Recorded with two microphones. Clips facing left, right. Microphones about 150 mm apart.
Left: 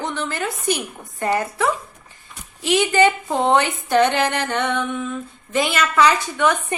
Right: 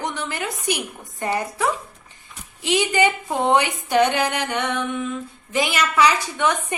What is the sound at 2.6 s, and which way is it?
A woman's voice, 15° right (ahead or behind).